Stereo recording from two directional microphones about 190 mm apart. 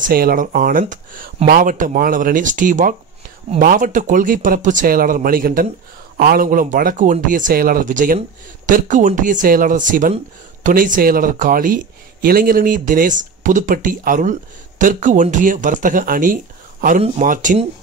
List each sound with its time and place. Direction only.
0.0 s speech: 50° right (ahead or behind)